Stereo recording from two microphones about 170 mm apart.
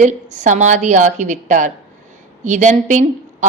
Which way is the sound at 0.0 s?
45° right (ahead or behind).